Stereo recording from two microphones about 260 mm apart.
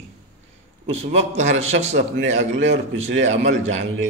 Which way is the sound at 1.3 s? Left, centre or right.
Right.